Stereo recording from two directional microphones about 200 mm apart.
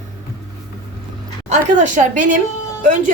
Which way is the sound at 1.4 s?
40° right (ahead or behind).